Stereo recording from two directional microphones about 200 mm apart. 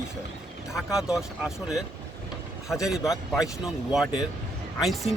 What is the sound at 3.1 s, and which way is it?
Speech, centre (ahead or behind).